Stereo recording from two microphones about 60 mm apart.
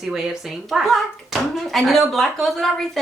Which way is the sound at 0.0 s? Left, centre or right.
Centre.